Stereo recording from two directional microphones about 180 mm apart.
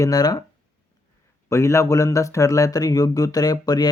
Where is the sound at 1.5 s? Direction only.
15° left (ahead or behind).